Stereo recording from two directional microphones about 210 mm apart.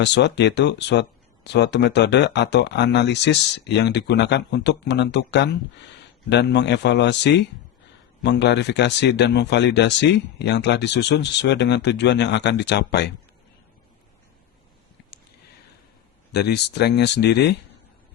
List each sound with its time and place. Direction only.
0.0 s speech: 55° left (ahead or behind)
16.3 s speech: 50° left (ahead or behind)